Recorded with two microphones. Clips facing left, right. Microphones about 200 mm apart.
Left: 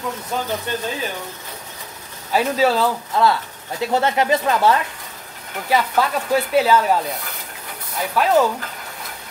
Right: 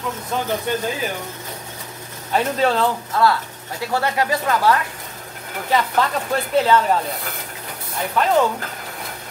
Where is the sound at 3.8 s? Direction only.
20° left (ahead or behind).